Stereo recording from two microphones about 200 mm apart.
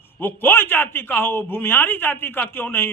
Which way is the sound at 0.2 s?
10° left (ahead or behind).